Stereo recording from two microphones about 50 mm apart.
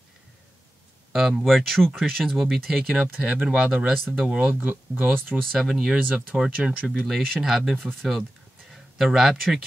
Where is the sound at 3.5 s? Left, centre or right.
Centre.